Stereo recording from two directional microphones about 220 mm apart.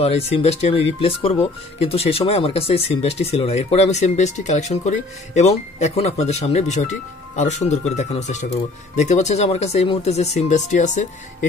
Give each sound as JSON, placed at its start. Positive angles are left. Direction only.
{"t": 0.0, "sound": "speech", "side_deg": 30}